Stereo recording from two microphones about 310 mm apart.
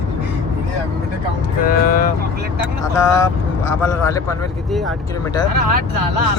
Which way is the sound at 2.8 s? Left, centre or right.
Centre.